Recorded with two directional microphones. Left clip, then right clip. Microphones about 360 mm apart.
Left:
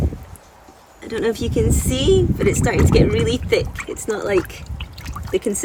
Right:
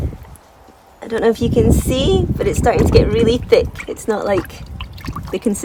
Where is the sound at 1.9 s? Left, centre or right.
Centre.